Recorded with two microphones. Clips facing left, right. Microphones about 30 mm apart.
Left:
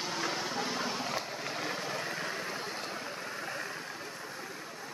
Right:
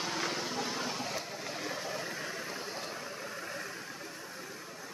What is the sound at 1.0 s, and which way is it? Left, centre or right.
Vehicle, left.